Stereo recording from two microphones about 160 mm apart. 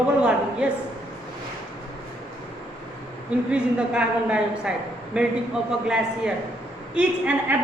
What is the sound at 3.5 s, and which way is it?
A woman's voice, 5° right (ahead or behind).